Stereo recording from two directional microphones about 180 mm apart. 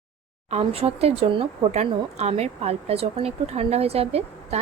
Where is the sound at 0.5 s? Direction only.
35° right (ahead or behind).